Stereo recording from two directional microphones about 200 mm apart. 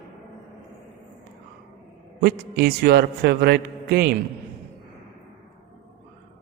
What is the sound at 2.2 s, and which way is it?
A man's voice, 50° right (ahead or behind).